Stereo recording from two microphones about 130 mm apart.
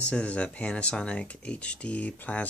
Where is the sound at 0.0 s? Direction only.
10° left (ahead or behind).